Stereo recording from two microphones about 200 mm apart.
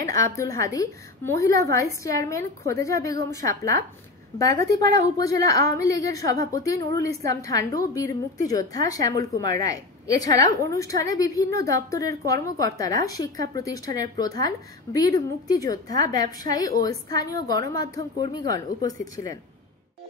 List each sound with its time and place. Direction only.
0.0 s a woman's voice: 15° left (ahead or behind)
5.1 s a woman's voice: 15° left (ahead or behind)